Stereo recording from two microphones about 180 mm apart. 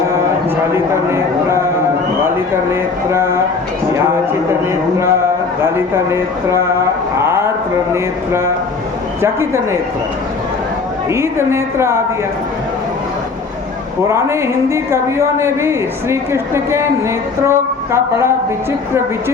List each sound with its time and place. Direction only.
3.1 s a woman's voice: 15° right (ahead or behind)
5.6 s a woman's voice: 15° right (ahead or behind)
7.2 s a sound: 15° right (ahead or behind)
9.2 s a woman's voice: 15° right (ahead or behind)
11.1 s a woman's voice: 15° right (ahead or behind)
14.1 s a woman's voice: 15° right (ahead or behind)